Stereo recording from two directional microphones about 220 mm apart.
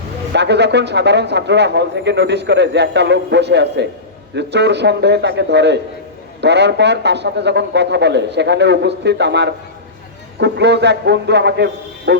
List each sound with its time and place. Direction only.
0.3 s a man's voice: 50° right (ahead or behind)